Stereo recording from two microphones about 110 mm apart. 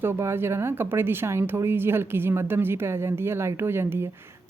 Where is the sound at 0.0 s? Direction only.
20° right (ahead or behind).